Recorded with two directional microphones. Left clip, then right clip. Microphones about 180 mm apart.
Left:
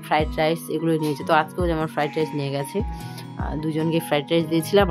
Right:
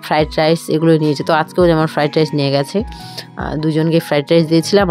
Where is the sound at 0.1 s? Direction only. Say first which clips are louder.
Right 7 dB; 45° right (ahead or behind).